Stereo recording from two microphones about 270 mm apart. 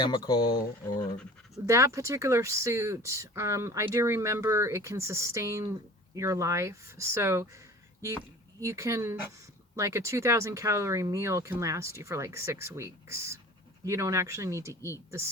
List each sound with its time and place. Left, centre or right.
0.0 s speech: centre
0.9 s speech: centre
1.6 s speech: centre
8.6 s speech: centre